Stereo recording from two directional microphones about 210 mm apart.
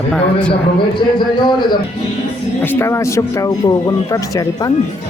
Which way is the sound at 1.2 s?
20° left (ahead or behind).